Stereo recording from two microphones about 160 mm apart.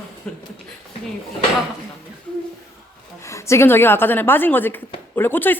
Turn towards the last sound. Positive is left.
turn(degrees=10)  # may be behind; listen again after turning